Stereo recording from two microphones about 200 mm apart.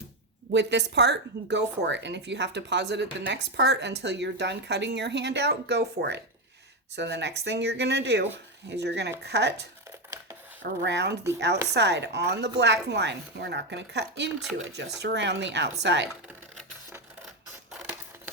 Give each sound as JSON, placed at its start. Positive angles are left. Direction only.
{"t": 0.5, "sound": "speech", "side_deg": -60}